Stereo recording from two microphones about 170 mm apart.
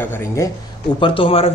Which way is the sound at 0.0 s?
15° left (ahead or behind).